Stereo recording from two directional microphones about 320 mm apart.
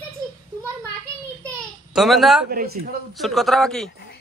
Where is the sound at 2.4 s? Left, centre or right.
Right.